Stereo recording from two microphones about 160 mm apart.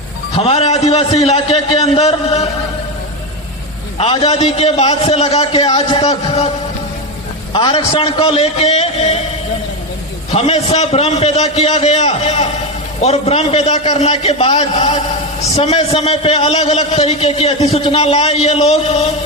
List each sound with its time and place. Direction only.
0.3 s a man's voice: 40° left (ahead or behind)
3.9 s a man's voice: 35° left (ahead or behind)
7.5 s a man's voice: 35° left (ahead or behind)
10.3 s a man's voice: 40° left (ahead or behind)